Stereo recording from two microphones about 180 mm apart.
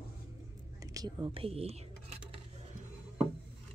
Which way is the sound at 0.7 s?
20° right (ahead or behind).